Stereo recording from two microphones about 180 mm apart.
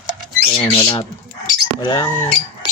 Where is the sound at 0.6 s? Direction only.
20° left (ahead or behind).